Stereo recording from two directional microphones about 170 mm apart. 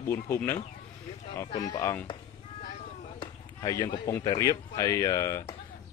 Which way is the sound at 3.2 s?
20° left (ahead or behind).